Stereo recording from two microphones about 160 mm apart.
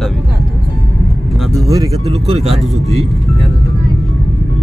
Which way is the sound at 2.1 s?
40° right (ahead or behind).